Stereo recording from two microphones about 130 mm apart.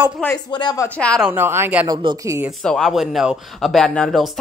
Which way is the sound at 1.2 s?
15° right (ahead or behind).